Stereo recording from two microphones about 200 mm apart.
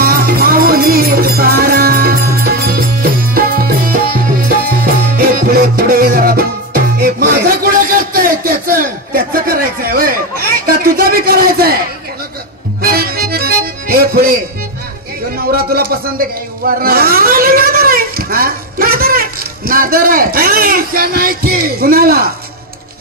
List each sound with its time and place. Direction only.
0.0 s music: 50° right (ahead or behind)
12.8 s accordion: 50° right (ahead or behind)
15.3 s a sound: 50° right (ahead or behind)